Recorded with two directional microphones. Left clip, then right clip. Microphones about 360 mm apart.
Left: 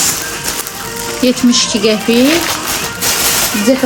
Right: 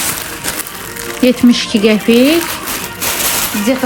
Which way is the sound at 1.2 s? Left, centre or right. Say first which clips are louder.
Right 1 dB; centre.